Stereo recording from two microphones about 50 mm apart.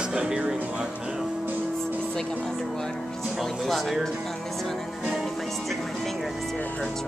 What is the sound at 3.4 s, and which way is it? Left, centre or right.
Speech, centre.